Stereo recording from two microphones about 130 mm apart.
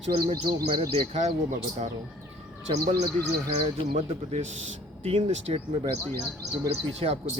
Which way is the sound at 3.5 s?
55° right (ahead or behind).